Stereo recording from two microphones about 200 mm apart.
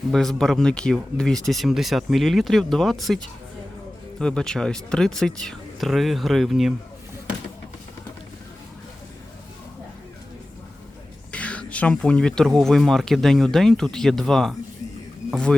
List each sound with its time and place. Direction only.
0.1 s speech: centre (ahead or behind)
4.2 s speech: 5° left (ahead or behind)
11.3 s speech: 5° left (ahead or behind)